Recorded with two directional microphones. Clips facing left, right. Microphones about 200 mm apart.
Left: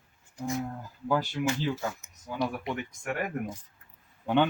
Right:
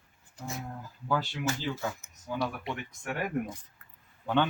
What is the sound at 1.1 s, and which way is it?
Speech, 15° left (ahead or behind).